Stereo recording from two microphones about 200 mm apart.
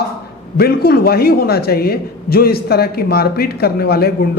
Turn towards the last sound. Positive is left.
turn(degrees=50)  # may be behind; listen again after turning